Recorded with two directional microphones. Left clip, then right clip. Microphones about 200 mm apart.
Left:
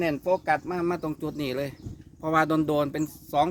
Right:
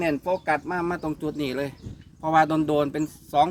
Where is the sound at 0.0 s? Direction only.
30° left (ahead or behind).